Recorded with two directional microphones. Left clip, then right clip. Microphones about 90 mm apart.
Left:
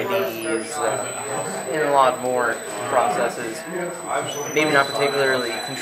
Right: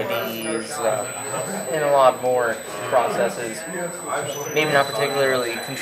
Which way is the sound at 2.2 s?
20° left (ahead or behind).